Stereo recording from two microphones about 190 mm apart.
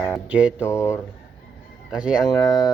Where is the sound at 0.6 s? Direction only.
15° left (ahead or behind).